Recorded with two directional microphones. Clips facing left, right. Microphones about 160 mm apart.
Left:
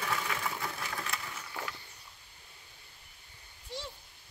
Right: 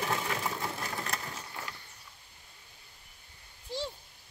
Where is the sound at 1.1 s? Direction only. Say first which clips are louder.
Right 2 dB; 35° right (ahead or behind).